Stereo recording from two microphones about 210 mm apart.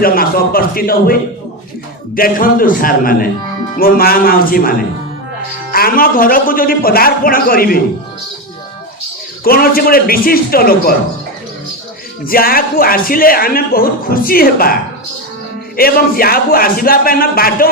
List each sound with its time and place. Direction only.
0.0 s speech: 45° left (ahead or behind)
5.7 s speech: 45° left (ahead or behind)
9.4 s speech: 45° left (ahead or behind)
12.2 s speech: 45° left (ahead or behind)